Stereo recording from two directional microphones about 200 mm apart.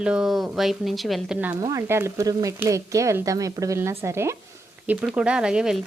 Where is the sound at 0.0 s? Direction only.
5° right (ahead or behind).